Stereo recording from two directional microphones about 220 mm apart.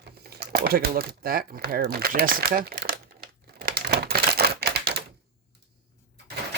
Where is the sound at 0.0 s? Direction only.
45° right (ahead or behind).